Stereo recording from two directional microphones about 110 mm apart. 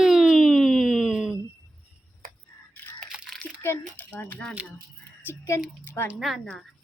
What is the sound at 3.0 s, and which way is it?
Crunch, 5° right (ahead or behind).